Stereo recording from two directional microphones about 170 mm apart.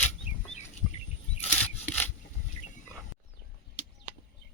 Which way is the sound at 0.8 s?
5° right (ahead or behind).